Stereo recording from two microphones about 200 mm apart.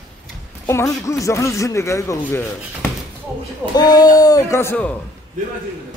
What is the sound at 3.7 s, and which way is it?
Speech, 20° left (ahead or behind).